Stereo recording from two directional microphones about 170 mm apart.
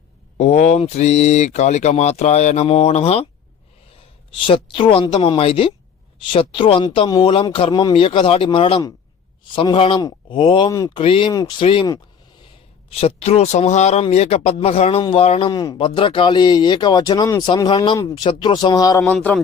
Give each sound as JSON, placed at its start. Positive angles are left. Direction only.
{"t": 0.3, "sound": "speech", "side_deg": 40}
{"t": 4.3, "sound": "speech", "side_deg": 30}
{"t": 19.0, "sound": "a man's voice", "side_deg": 5}